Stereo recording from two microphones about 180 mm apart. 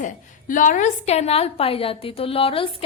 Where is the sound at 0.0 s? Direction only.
45° left (ahead or behind).